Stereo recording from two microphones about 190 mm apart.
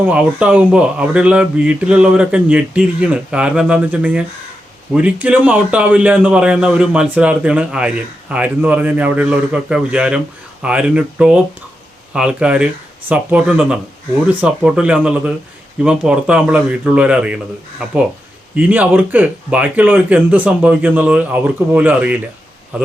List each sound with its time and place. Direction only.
0.0 s a man's voice: 5° right (ahead or behind)